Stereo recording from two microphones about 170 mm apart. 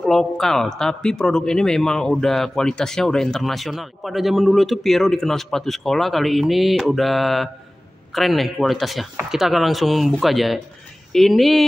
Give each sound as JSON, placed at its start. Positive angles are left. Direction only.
{"t": 0.0, "sound": "speech", "side_deg": 5}